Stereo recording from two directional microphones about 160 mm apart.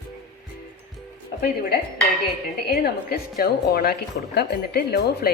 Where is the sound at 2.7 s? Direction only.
80° left.